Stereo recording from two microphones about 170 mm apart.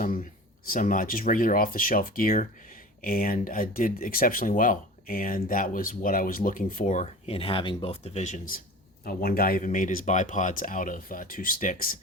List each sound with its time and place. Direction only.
0.0 s speech: 55° left (ahead or behind)